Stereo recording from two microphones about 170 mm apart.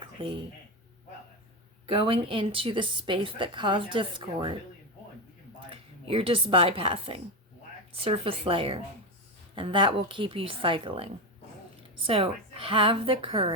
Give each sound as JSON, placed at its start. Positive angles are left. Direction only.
{"t": 0.0, "sound": "a sound", "side_deg": -30}
{"t": 1.9, "sound": "a woman's voice", "side_deg": -30}
{"t": 5.5, "sound": "a woman's voice", "side_deg": -35}